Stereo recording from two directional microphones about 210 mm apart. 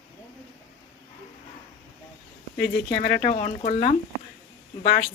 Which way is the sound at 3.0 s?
45° left (ahead or behind).